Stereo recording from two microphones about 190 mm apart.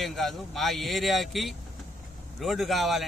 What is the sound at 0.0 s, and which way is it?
Speech, centre (ahead or behind).